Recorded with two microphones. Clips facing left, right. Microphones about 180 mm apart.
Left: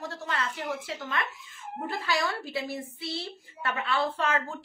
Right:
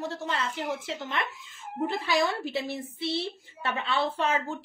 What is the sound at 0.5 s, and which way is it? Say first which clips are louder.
Speech: right 2 dB; 25° right (ahead or behind).